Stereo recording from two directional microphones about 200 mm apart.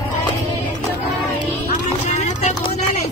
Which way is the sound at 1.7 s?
35° left (ahead or behind).